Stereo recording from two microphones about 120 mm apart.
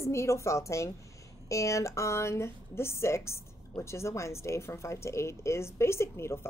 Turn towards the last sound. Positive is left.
turn(degrees=20)  # may be behind; listen again after turning